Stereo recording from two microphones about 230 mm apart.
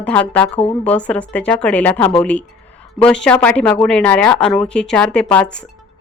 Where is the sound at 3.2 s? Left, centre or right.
Centre.